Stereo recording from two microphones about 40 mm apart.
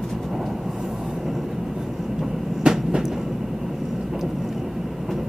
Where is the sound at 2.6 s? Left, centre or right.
Right.